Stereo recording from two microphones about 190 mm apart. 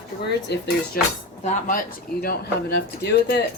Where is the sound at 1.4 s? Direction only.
45° left (ahead or behind).